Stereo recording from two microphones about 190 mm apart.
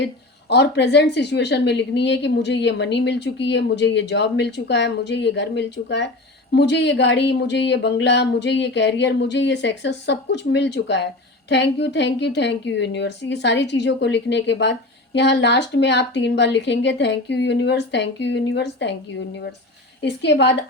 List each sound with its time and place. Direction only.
0.0 s a woman's voice: 65° left (ahead or behind)